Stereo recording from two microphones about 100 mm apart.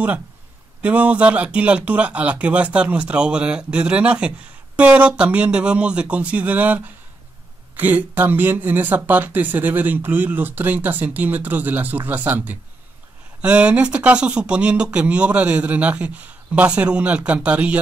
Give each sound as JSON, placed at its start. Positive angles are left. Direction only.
{"t": 0.8, "sound": "speech", "side_deg": -15}